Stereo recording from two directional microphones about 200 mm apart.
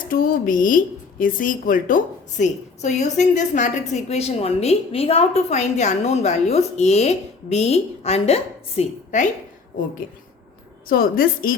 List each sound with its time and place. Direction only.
0.0 s a woman's voice: 45° left (ahead or behind)
10.8 s a woman's voice: 45° left (ahead or behind)